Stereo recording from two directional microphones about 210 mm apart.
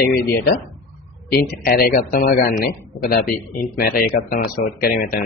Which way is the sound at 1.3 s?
45° left (ahead or behind).